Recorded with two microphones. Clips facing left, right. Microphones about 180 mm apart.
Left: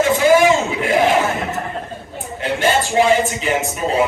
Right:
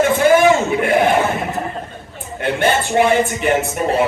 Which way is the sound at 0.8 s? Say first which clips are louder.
Right 1 dB; 55° right (ahead or behind).